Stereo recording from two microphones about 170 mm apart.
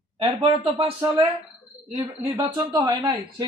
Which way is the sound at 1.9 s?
20° right (ahead or behind).